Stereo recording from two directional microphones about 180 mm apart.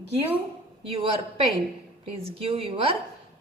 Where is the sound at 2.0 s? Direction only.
30° right (ahead or behind).